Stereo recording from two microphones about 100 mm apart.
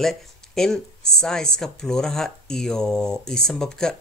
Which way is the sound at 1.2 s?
5° left (ahead or behind).